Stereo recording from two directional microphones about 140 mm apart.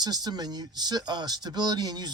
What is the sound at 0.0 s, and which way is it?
Speech, 30° right (ahead or behind).